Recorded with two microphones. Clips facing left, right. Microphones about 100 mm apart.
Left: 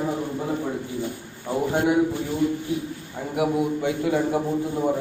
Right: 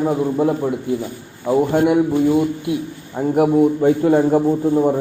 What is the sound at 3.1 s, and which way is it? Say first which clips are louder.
A man's voice: right 9 dB; 45° right (ahead or behind).